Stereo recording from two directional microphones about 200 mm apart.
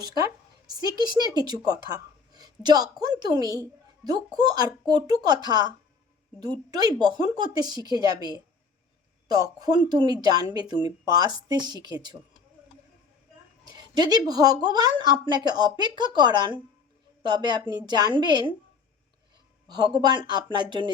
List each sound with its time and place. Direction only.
0.0 s a woman's voice: 20° right (ahead or behind)
1.3 s a woman's voice: 20° right (ahead or behind)
2.3 s a sound: 20° right (ahead or behind)
3.0 s a woman's voice: 20° right (ahead or behind)
13.7 s a woman's voice: 20° right (ahead or behind)
19.6 s a woman's voice: 20° right (ahead or behind)